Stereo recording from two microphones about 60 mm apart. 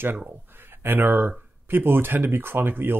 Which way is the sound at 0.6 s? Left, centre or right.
Right.